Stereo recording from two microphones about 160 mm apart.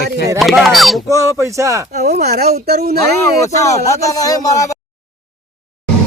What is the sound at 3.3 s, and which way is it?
Speech, 20° left (ahead or behind).